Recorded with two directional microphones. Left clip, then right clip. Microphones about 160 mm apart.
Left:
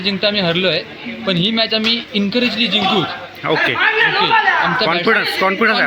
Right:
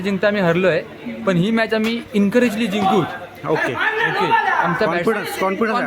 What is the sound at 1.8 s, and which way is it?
Speech, 65° right (ahead or behind).